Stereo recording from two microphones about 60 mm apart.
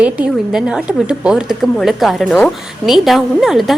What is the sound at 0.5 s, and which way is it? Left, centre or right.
A woman's voice, centre.